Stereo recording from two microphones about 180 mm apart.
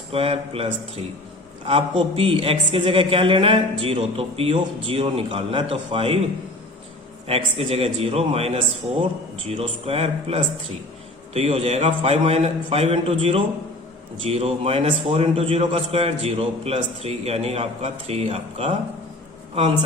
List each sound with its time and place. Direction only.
0.1 s a man's voice: 30° right (ahead or behind)
7.3 s a man's voice: 35° right (ahead or behind)